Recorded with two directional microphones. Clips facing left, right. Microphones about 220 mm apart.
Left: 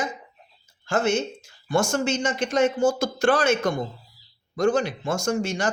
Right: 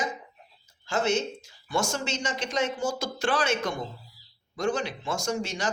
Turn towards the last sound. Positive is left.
turn(degrees=50)  # may be behind; listen again after turning